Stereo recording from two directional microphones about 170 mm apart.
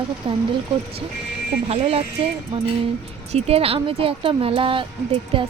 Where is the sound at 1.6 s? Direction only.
35° right (ahead or behind).